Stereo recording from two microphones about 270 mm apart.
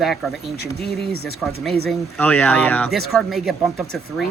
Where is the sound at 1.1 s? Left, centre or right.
Right.